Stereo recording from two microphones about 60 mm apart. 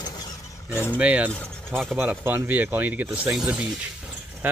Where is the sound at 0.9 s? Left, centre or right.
Right.